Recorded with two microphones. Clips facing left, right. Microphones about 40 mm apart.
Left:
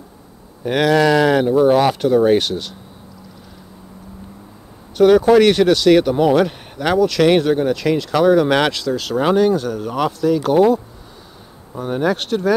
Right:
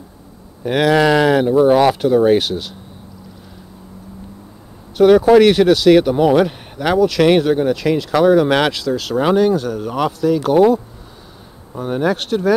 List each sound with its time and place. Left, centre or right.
0.7 s speech: centre
4.9 s speech: centre